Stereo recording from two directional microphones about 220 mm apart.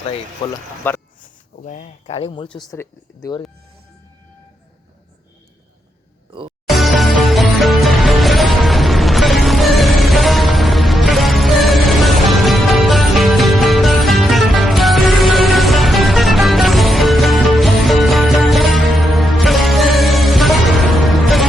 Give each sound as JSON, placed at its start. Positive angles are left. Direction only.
{"t": 0.4, "sound": "speech", "side_deg": 20}
{"t": 0.9, "sound": "speech", "side_deg": 10}
{"t": 1.6, "sound": "speech", "side_deg": 35}
{"t": 6.7, "sound": "music", "side_deg": 0}